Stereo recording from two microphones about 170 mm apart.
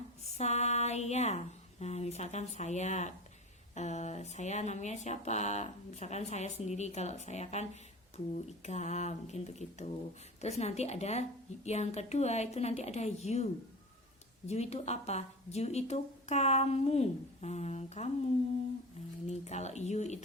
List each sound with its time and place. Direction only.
0.3 s speech: 40° left (ahead or behind)
14.4 s speech: 40° left (ahead or behind)
19.3 s speech: 40° left (ahead or behind)